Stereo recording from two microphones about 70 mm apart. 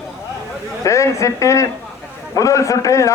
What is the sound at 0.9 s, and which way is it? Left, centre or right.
A man's voice, left.